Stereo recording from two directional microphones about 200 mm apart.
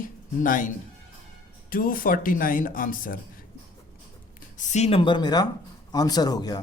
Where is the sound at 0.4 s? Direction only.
40° left (ahead or behind).